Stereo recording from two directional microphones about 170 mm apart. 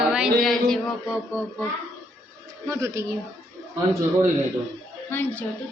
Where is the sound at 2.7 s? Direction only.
15° right (ahead or behind).